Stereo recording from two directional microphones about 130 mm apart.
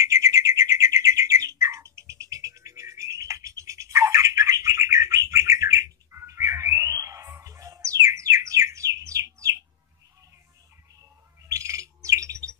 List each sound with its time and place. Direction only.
0.0 s bird: 25° right (ahead or behind)
11.4 s bird: 25° right (ahead or behind)